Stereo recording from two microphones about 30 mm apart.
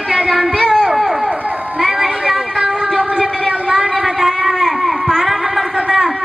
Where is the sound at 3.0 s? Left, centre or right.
Right.